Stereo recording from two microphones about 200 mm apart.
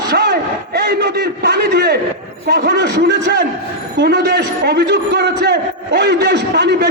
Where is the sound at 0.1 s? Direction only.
55° right (ahead or behind).